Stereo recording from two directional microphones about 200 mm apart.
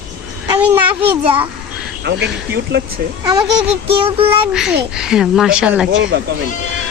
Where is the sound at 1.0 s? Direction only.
25° right (ahead or behind).